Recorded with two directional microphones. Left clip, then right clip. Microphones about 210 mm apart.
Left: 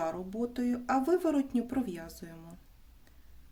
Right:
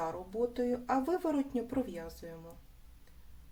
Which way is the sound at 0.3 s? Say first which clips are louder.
Right 2 dB; 45° left (ahead or behind).